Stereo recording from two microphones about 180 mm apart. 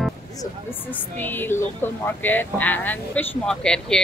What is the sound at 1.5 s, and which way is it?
Speech, 10° left (ahead or behind).